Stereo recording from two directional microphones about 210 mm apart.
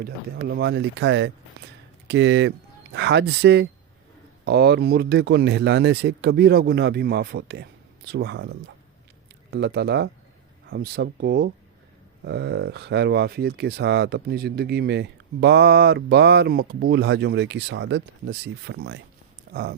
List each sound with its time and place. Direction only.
0.0 s speech: 50° right (ahead or behind)